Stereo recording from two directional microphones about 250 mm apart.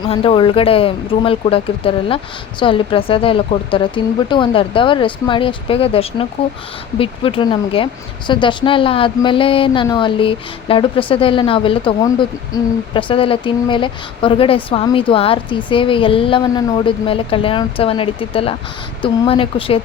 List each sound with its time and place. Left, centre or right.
0.0 s speech: left